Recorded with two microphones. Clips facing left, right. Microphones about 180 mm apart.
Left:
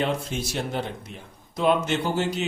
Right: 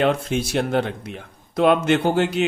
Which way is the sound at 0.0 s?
65° right (ahead or behind).